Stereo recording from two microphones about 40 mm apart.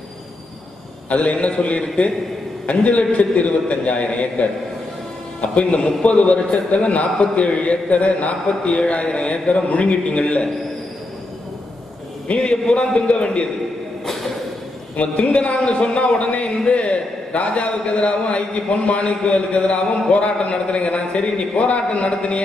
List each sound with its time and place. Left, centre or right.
1.0 s a man's voice: left
12.4 s a man's voice: left
14.0 s a sound: centre
15.0 s a man's voice: left